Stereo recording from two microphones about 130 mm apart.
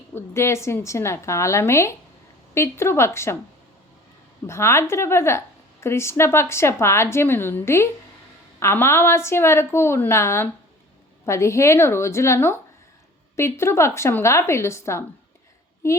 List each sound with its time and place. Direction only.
0.1 s a woman's voice: 20° left (ahead or behind)
4.4 s a woman's voice: 20° left (ahead or behind)